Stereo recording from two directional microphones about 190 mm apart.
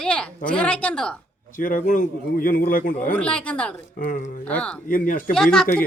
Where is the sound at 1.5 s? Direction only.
45° left (ahead or behind).